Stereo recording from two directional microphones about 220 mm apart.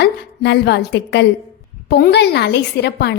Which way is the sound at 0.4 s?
50° left (ahead or behind).